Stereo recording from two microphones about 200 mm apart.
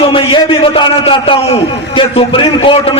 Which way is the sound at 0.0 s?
25° left (ahead or behind).